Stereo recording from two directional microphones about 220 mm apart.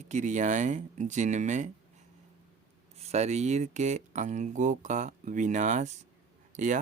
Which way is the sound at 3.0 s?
30° right (ahead or behind).